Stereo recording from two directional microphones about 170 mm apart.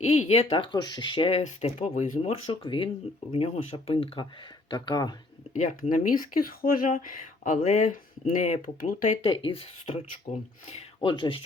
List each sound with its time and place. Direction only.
0.0 s speech: 40° left (ahead or behind)
2.5 s speech: 30° left (ahead or behind)
5.5 s speech: 40° left (ahead or behind)
8.6 s speech: 55° left (ahead or behind)
9.2 s speech: 30° left (ahead or behind)
10.3 s speech: 45° left (ahead or behind)
10.7 s speech: 30° left (ahead or behind)